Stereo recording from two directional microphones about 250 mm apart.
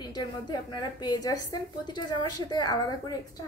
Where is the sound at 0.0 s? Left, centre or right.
Centre.